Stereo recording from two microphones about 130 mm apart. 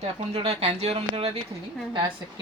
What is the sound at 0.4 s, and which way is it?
Speech, 55° right (ahead or behind).